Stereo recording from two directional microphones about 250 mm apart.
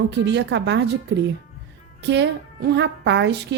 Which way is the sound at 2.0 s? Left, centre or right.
Right.